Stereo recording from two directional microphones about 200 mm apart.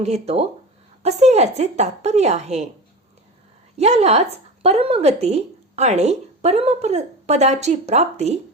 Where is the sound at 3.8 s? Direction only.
35° right (ahead or behind).